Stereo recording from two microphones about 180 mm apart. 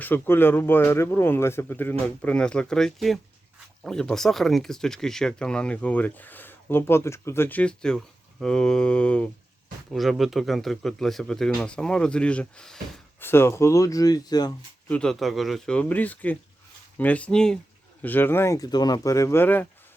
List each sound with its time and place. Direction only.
0.0 s speech: 10° left (ahead or behind)
14.8 s speech: 5° left (ahead or behind)